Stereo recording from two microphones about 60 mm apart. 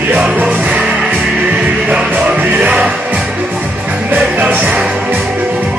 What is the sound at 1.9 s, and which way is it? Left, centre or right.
Music, centre.